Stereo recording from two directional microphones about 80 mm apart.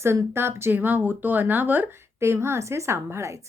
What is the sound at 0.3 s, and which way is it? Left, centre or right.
Speech, right.